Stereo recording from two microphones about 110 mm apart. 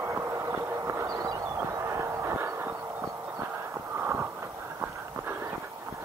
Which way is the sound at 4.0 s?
20° right (ahead or behind).